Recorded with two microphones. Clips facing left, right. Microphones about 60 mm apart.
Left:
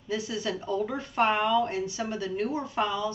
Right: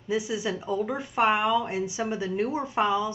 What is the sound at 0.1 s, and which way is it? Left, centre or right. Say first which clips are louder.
A woman's voice: right 3 dB; centre.